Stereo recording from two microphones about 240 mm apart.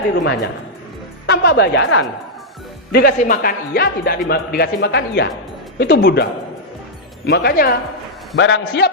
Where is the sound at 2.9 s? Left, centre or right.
Left.